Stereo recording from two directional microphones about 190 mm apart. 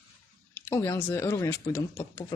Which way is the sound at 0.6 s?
15° left (ahead or behind).